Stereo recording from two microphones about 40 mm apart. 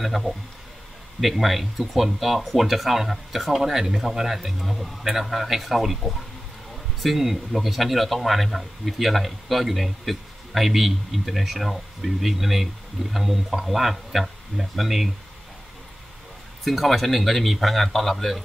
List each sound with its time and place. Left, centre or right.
0.0 s speech: centre
16.6 s speech: centre